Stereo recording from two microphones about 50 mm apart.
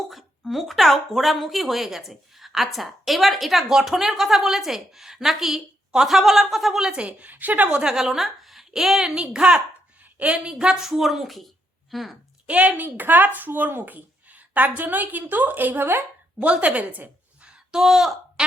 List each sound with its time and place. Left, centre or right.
0.1 s speech: centre
7.1 s speech: right
7.7 s a woman's voice: centre
10.7 s a woman's voice: centre
12.5 s speech: right
12.8 s speech: right
16.4 s a woman's voice: right
17.5 s a sound: centre